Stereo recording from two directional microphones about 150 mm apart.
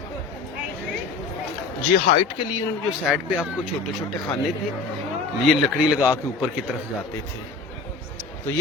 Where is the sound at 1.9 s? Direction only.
40° left (ahead or behind).